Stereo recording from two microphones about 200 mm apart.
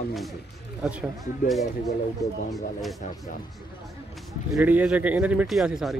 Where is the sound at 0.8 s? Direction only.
5° right (ahead or behind).